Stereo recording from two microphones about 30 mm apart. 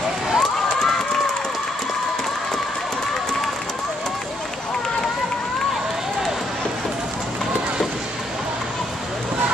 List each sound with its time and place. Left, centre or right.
0.4 s run: centre